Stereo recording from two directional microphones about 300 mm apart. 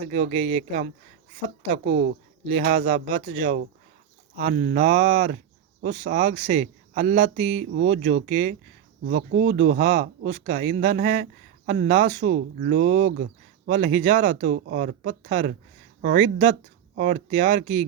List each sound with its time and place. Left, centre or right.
0.1 s a man's voice: right
2.5 s a man's voice: right
9.0 s speech: right
9.8 s a man's voice: right
12.2 s a man's voice: right